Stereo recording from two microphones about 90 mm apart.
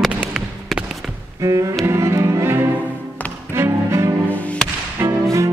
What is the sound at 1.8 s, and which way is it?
Cello, 30° right (ahead or behind).